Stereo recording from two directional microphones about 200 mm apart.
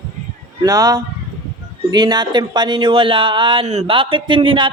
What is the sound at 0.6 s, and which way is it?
Speech, 20° right (ahead or behind).